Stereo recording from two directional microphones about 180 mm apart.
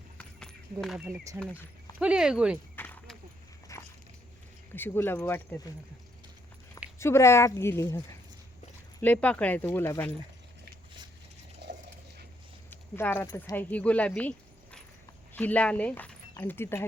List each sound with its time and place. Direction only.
0.2 s a sound: 5° left (ahead or behind)
1.0 s speech: 15° right (ahead or behind)
1.4 s speech: 5° left (ahead or behind)
2.0 s speech: 5° right (ahead or behind)
2.7 s a sound: 10° left (ahead or behind)
3.7 s dog: 15° left (ahead or behind)
4.7 s speech: 10° left (ahead or behind)
7.0 s speech: 15° left (ahead or behind)
11.6 s dog: 70° right (ahead or behind)
12.7 s speech: 10° left (ahead or behind)